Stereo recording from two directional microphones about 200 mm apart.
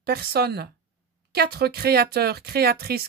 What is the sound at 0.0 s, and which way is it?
Speech, 50° right (ahead or behind).